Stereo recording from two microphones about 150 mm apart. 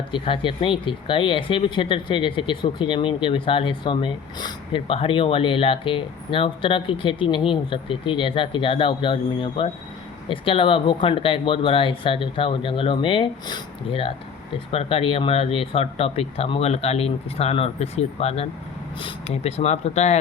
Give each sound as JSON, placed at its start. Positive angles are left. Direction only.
{"t": 0.1, "sound": "speech", "side_deg": 35}